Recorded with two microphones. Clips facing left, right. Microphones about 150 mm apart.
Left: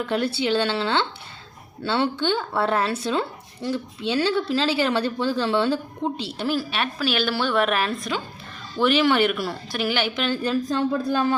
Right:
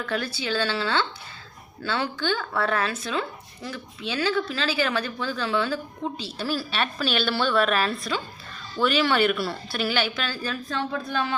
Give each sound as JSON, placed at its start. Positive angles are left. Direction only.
{"t": 0.0, "sound": "speech", "side_deg": 25}